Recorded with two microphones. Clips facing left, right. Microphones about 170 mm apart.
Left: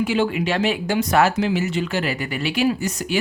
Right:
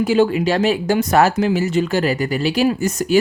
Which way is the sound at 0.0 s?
40° right (ahead or behind).